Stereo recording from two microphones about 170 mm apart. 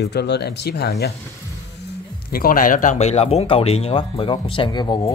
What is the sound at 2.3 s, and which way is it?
Speech, 60° left (ahead or behind).